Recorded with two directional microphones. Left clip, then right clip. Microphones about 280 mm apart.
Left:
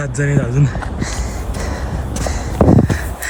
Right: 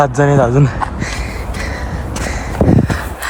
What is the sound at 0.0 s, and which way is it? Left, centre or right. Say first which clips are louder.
Speech: right 9 dB; centre.